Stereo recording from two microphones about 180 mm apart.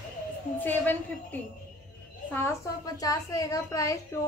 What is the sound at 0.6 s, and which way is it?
A woman's voice, 10° left (ahead or behind).